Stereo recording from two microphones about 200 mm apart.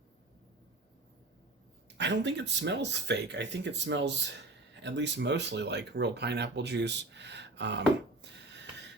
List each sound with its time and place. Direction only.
2.0 s speech: 60° right (ahead or behind)